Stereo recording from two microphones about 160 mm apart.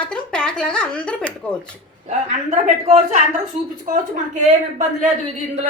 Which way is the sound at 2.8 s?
45° right (ahead or behind).